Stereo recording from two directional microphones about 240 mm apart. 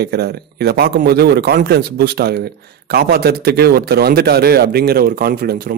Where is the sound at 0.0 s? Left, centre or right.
Right.